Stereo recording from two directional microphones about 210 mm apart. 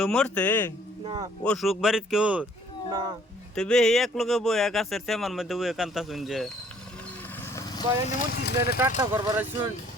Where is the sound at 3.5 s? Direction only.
5° left (ahead or behind).